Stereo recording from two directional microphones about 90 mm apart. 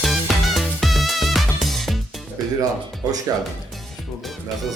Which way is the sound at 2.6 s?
45° right (ahead or behind).